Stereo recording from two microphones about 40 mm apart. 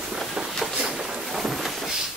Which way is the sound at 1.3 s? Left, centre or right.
Centre.